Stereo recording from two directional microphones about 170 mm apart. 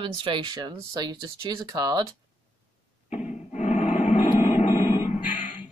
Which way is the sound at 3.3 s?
45° left (ahead or behind).